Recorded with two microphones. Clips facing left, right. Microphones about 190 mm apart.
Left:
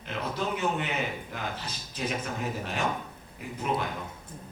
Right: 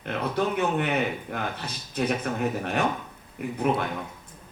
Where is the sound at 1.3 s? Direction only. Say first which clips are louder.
Right 4 dB; 60° right (ahead or behind).